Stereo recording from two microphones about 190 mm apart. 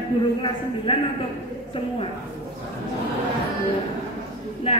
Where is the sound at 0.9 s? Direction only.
25° left (ahead or behind).